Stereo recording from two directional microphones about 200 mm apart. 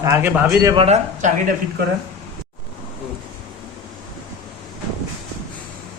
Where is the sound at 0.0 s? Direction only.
15° right (ahead or behind).